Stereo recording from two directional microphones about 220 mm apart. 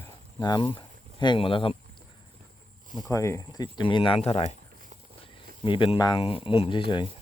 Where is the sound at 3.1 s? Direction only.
15° left (ahead or behind).